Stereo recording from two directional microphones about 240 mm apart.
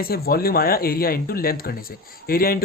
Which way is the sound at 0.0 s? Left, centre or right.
Left.